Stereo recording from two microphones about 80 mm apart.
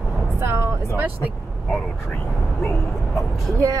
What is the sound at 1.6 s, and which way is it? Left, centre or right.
Speech, centre.